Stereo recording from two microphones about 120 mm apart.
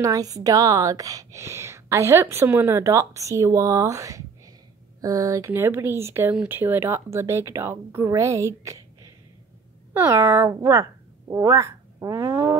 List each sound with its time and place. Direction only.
0.0 s a woman's voice: 30° right (ahead or behind)
9.9 s speech: 20° right (ahead or behind)